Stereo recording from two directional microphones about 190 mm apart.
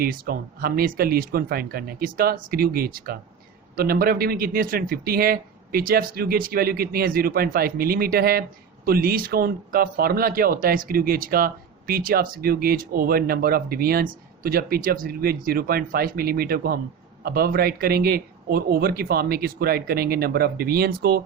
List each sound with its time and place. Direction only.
0.0 s speech: 50° right (ahead or behind)